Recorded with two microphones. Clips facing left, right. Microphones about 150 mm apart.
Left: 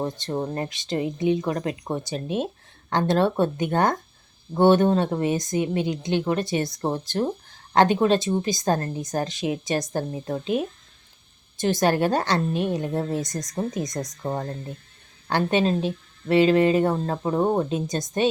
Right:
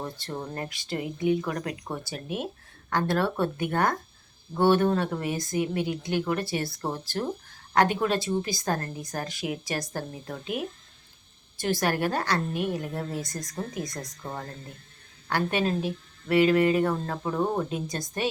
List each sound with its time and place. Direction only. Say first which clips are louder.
0.0 s a woman's voice: left 7 dB; 25° left (ahead or behind)
14.3 s a woman's voice: left 9 dB; 30° left (ahead or behind)